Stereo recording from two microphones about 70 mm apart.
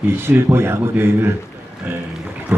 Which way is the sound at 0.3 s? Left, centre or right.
Right.